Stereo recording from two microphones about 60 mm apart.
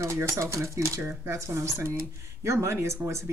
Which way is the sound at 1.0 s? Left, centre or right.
Right.